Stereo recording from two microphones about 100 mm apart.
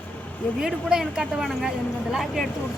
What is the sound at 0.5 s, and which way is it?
Speech, 5° right (ahead or behind).